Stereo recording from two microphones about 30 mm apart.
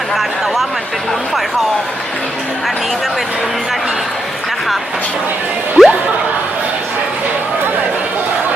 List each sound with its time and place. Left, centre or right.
5.8 s music: centre